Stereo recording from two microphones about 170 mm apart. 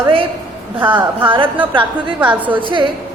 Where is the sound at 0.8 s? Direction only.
10° right (ahead or behind).